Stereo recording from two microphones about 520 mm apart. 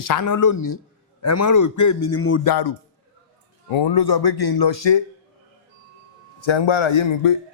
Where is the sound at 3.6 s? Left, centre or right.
Left.